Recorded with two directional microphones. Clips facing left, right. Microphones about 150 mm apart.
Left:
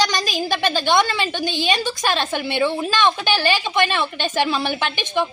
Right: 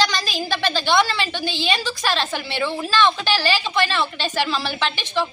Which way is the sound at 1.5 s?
50° left (ahead or behind).